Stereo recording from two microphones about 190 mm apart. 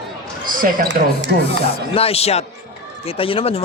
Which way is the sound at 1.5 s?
30° left (ahead or behind).